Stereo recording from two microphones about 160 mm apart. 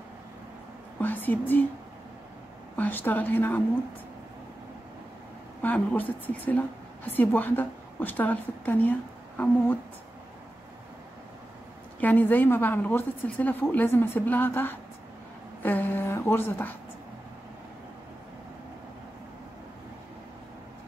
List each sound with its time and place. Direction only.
1.0 s a woman's voice: 10° left (ahead or behind)
2.7 s a woman's voice: 10° left (ahead or behind)
5.6 s a woman's voice: 10° left (ahead or behind)
12.0 s a woman's voice: 10° left (ahead or behind)